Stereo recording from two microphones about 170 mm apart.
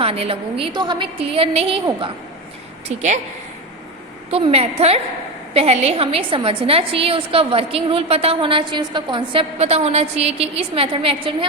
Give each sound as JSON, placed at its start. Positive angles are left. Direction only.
{"t": 0.0, "sound": "a woman's voice", "side_deg": -35}
{"t": 4.3, "sound": "a woman's voice", "side_deg": -35}